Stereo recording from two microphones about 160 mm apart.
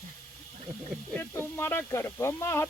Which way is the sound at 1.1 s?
15° left (ahead or behind).